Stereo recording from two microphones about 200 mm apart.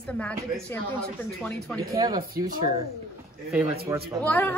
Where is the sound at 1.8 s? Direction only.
20° right (ahead or behind).